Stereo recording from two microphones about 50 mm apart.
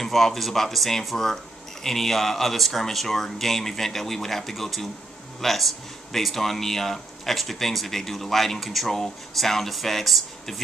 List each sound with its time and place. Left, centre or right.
0.0 s speech: centre